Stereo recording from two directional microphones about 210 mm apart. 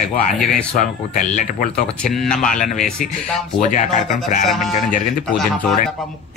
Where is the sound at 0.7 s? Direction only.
40° left (ahead or behind).